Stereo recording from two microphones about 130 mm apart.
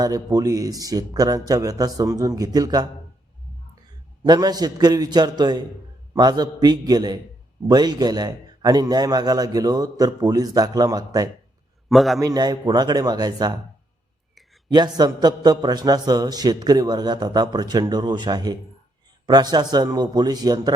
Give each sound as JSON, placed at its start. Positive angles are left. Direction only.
{"t": 0.0, "sound": "a man's voice", "side_deg": -30}
{"t": 4.2, "sound": "a man's voice", "side_deg": -30}
{"t": 11.9, "sound": "a man's voice", "side_deg": 0}
{"t": 12.2, "sound": "a man's voice", "side_deg": -30}
{"t": 14.7, "sound": "a man's voice", "side_deg": -30}